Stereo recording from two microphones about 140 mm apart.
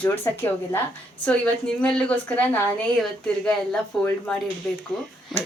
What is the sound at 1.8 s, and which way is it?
Speech, 10° left (ahead or behind).